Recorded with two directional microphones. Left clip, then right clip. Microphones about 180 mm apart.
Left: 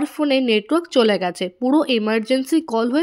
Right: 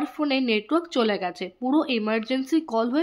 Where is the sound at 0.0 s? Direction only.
30° left (ahead or behind).